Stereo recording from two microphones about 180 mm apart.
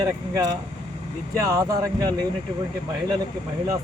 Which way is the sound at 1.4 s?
20° right (ahead or behind).